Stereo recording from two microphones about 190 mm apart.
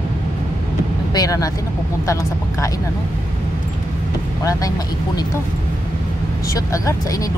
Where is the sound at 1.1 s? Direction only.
20° left (ahead or behind).